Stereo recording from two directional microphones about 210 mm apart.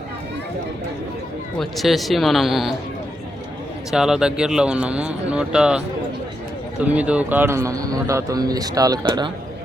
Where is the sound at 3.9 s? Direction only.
5° right (ahead or behind); by 9.3 s 20° right (ahead or behind).